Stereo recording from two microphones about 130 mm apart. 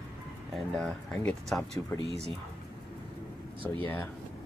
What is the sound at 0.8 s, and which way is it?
Speech, centre (ahead or behind).